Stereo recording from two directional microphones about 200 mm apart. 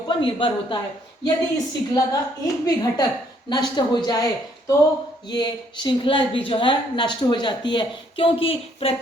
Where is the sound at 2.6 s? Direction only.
20° left (ahead or behind).